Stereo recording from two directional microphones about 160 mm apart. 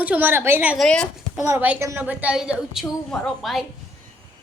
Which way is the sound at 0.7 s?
5° left (ahead or behind).